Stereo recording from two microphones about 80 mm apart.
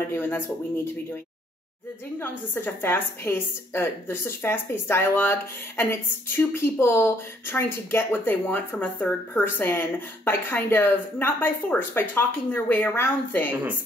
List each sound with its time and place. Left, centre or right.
0.1 s a woman's voice: left
2.1 s a woman's voice: left